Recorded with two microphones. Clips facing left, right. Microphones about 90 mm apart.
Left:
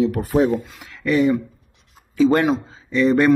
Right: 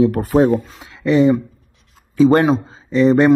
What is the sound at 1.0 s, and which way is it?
Speech, 25° right (ahead or behind).